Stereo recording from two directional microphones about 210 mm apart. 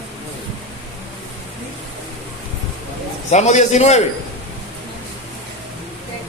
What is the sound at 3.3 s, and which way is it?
Speech, 30° left (ahead or behind).